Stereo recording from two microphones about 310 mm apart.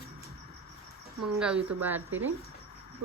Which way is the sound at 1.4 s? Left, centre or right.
Centre.